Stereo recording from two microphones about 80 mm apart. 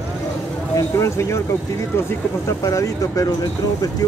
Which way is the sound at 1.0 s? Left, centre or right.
Left.